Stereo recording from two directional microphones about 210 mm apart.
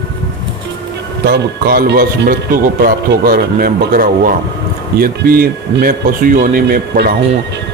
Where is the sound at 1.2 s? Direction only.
50° right (ahead or behind).